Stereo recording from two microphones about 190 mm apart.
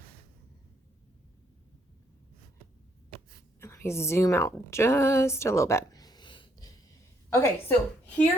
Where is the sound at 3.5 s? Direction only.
15° left (ahead or behind).